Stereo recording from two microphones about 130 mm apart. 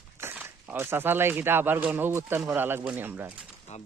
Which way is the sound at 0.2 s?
15° right (ahead or behind).